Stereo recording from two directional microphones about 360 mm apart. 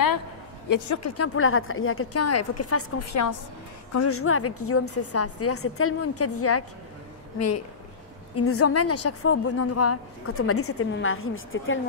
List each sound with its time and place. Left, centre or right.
0.7 s speech: left
3.9 s a woman's voice: left